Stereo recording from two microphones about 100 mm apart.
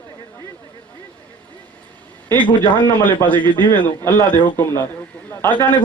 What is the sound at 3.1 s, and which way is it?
A man's voice, 15° left (ahead or behind).